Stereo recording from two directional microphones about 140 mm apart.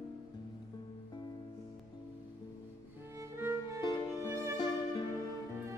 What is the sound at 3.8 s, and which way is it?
Music, 30° left (ahead or behind).